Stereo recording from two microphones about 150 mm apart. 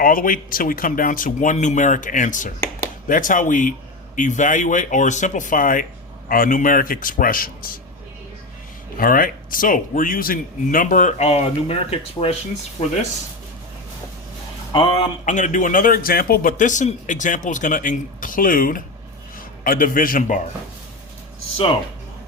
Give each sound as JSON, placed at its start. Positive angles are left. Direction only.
{"t": 0.0, "sound": "a man's voice", "side_deg": 70}
{"t": 9.0, "sound": "a man's voice", "side_deg": 70}
{"t": 14.7, "sound": "speech", "side_deg": 35}
{"t": 15.2, "sound": "a man's voice", "side_deg": 55}